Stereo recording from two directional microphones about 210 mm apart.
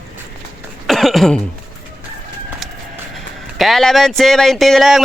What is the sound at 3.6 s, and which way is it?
Speech, centre (ahead or behind).